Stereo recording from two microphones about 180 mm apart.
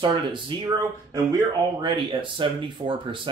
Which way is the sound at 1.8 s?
25° right (ahead or behind).